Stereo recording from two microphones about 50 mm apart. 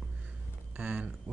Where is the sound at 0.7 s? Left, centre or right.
Right.